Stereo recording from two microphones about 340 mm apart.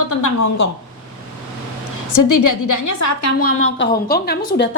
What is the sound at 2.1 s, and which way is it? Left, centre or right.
A woman's voice, left.